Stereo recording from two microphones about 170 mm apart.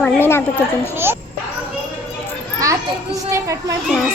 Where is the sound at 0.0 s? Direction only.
15° left (ahead or behind).